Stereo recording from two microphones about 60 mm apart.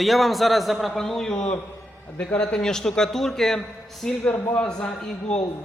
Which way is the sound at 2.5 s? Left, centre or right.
Centre.